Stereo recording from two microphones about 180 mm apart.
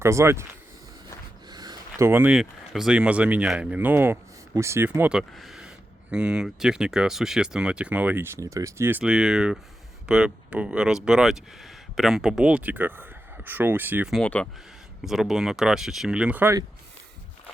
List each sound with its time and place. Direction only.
0.0 s speech: 15° right (ahead or behind)
1.5 s speech: 25° right (ahead or behind)
14.2 s speech: 5° left (ahead or behind); by 16.6 s 10° right (ahead or behind)